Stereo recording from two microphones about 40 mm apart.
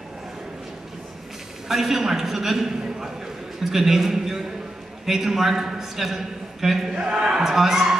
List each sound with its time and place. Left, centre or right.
1.7 s a man's voice: centre
7.1 s speech: right
7.3 s a man's voice: centre